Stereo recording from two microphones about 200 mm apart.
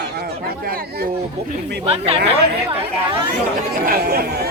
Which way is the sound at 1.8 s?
30° right (ahead or behind).